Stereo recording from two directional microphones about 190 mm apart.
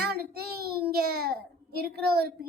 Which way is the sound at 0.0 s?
55° right (ahead or behind).